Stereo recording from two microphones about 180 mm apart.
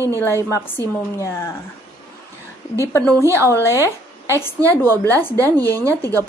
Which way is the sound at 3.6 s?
15° left (ahead or behind).